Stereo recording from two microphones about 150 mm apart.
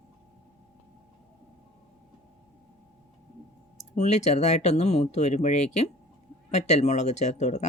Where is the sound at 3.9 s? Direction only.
50° left (ahead or behind).